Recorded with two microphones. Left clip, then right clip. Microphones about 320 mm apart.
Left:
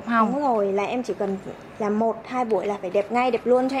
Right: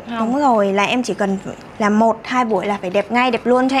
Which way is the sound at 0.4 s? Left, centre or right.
Right.